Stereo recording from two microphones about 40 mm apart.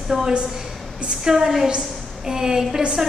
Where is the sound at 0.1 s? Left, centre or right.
Centre.